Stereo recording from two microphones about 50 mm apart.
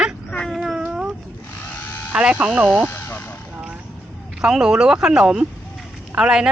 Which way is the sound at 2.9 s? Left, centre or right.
Left.